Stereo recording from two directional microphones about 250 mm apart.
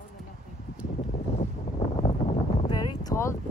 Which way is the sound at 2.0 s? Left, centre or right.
Left.